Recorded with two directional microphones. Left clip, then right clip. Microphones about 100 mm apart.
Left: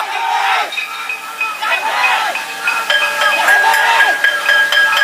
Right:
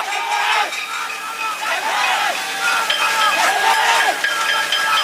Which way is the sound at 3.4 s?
Centre (ahead or behind).